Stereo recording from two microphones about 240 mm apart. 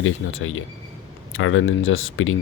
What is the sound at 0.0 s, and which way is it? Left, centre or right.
Speech, left.